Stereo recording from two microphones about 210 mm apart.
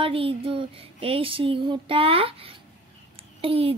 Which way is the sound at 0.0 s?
25° right (ahead or behind).